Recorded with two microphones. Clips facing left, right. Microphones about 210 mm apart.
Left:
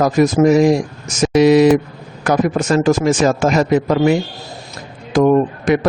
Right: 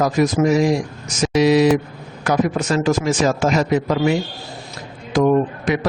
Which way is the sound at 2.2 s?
50° left (ahead or behind).